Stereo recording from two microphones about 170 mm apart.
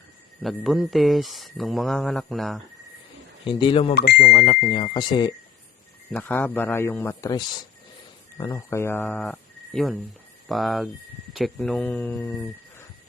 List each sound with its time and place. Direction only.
0.4 s speech: centre (ahead or behind)
3.4 s speech: 30° left (ahead or behind)
3.9 s speech: 65° left (ahead or behind)
4.7 s speech: 30° left (ahead or behind)
6.1 s speech: 10° left (ahead or behind)